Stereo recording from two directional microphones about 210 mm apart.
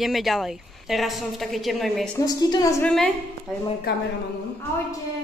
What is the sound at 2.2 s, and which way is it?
Speech, 15° left (ahead or behind).